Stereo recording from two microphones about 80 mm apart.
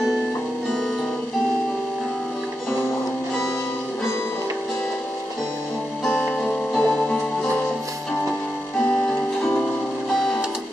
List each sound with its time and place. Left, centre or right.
6.0 s music: centre
8.7 s music: centre